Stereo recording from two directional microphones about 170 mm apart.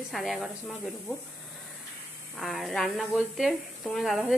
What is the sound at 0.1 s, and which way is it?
Speech, centre (ahead or behind).